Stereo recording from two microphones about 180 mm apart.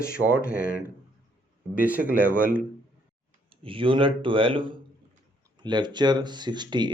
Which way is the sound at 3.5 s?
30° right (ahead or behind).